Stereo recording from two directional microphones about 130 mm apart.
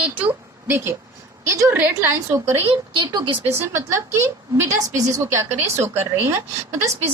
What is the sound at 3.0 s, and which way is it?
Speech, 35° right (ahead or behind).